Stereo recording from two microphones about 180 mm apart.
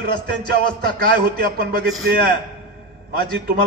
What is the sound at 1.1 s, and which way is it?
Speech, 55° right (ahead or behind).